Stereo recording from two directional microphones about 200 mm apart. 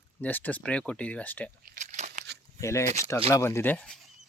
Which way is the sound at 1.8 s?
35° right (ahead or behind).